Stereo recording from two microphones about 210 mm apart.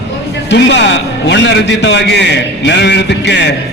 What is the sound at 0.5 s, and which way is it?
A man's voice, 55° left (ahead or behind).